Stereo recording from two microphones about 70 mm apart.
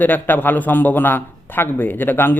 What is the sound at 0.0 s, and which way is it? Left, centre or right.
A man's voice, left.